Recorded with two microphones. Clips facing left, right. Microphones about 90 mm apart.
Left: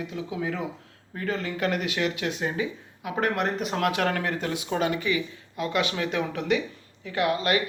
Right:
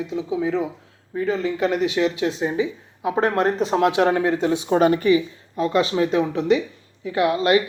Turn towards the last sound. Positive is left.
turn(degrees=-25)  # may be behind; listen again after turning